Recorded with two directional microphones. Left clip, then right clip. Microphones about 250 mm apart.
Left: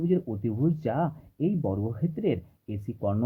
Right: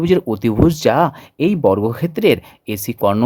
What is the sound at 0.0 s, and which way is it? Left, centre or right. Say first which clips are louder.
Speech: right 13 dB; right.